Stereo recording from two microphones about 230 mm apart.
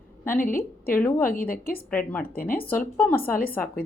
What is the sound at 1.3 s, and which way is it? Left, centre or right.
Speech, left.